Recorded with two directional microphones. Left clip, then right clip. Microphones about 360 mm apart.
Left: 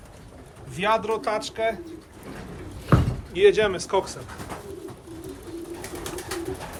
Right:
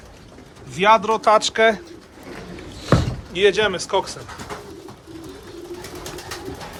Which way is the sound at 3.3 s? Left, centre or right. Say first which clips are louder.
Right 1 dB; centre.